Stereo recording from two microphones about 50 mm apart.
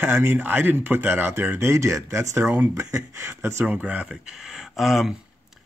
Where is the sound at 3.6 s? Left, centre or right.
Right.